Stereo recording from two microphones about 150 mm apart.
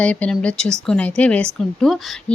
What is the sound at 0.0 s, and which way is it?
A woman's voice, 10° left (ahead or behind).